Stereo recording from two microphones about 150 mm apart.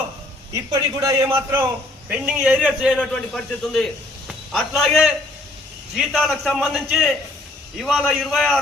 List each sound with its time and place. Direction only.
0.5 s a man's voice: 25° right (ahead or behind); by 8.5 s centre (ahead or behind)